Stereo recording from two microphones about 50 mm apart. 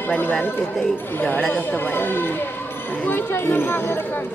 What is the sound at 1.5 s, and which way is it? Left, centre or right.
Speech, left.